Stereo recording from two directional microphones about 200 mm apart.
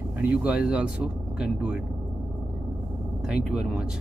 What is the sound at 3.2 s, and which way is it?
Speech, 5° right (ahead or behind).